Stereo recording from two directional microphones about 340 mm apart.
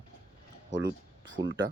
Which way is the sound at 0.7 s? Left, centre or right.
Right.